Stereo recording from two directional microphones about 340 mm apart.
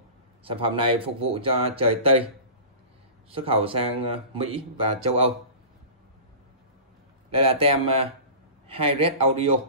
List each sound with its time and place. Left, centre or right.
0.4 s speech: centre
3.3 s speech: centre
7.2 s speech: centre